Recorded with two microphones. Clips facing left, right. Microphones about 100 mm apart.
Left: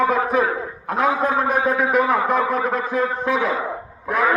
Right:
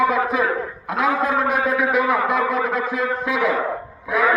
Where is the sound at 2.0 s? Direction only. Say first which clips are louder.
Even; 25° left (ahead or behind).